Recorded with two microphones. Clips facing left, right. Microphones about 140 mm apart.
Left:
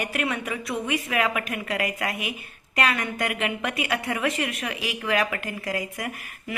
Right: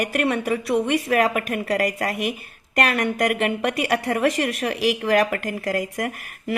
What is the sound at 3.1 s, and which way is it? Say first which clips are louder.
A woman's voice: right 6 dB; 45° right (ahead or behind).